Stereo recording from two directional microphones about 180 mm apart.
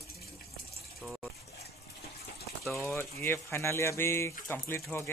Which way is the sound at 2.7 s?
10° left (ahead or behind).